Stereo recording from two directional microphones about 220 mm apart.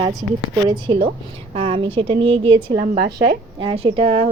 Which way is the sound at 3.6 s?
25° right (ahead or behind).